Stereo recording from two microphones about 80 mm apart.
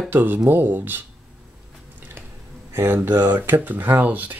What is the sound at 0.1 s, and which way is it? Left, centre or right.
Speech, right.